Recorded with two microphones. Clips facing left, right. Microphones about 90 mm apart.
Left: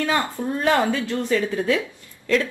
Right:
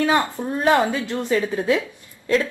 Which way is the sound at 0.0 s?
20° right (ahead or behind).